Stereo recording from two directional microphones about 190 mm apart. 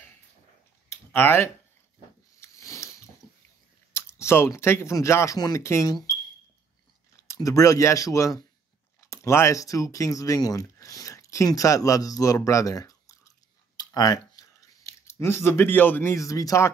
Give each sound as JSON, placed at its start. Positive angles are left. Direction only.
{"t": 0.8, "sound": "a sound", "side_deg": 10}
{"t": 3.9, "sound": "speech", "side_deg": 15}
{"t": 7.2, "sound": "speech", "side_deg": 15}